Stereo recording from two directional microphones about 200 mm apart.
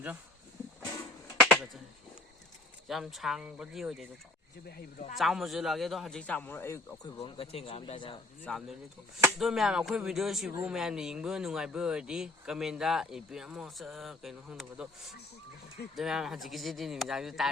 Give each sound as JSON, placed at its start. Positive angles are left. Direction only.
{"t": 1.4, "sound": "finger snapping", "side_deg": 5}
{"t": 2.8, "sound": "speech", "side_deg": 0}
{"t": 5.1, "sound": "speech", "side_deg": 0}
{"t": 7.2, "sound": "speech", "side_deg": 30}
{"t": 8.5, "sound": "speech", "side_deg": 5}
{"t": 16.0, "sound": "speech", "side_deg": 0}